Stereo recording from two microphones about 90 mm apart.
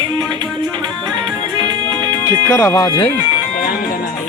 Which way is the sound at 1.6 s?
55° right (ahead or behind).